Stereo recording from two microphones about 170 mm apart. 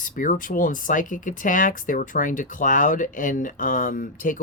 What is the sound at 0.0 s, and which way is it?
Speech, 50° left (ahead or behind).